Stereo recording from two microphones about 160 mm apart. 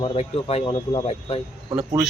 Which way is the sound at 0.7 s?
25° left (ahead or behind).